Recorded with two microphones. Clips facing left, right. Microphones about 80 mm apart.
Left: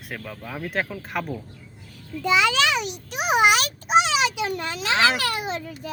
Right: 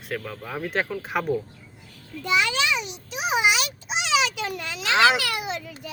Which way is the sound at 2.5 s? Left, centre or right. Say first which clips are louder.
Left 3 dB; left.